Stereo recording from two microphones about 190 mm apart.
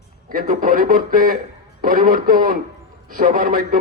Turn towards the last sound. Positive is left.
turn(degrees=-50)  # may be behind; listen again after turning